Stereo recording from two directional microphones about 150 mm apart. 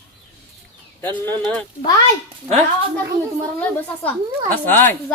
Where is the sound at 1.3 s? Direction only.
10° left (ahead or behind).